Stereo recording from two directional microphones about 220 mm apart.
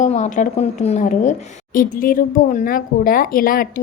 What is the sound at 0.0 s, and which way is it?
A woman's voice, 35° left (ahead or behind).